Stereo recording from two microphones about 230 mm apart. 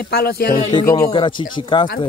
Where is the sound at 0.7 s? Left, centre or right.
Left.